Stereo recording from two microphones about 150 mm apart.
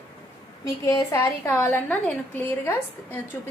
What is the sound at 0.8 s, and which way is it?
A woman's voice, 20° left (ahead or behind).